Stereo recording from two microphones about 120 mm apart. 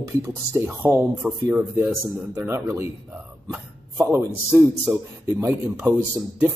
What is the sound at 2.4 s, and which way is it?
Speech, 25° right (ahead or behind).